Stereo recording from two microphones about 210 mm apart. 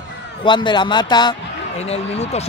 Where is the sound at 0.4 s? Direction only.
20° left (ahead or behind).